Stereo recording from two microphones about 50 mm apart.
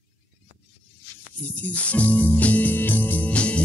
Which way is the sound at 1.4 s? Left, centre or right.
Left.